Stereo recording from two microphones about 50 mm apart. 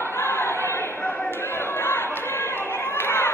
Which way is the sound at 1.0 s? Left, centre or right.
Left.